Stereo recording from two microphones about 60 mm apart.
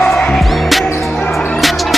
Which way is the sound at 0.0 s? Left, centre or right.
Centre.